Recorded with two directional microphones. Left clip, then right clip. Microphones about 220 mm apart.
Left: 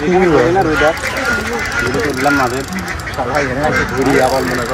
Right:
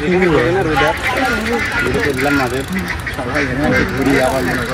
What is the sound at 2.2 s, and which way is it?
Speech, 25° left (ahead or behind).